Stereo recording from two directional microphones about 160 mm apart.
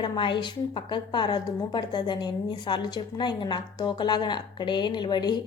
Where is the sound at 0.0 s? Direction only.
30° left (ahead or behind).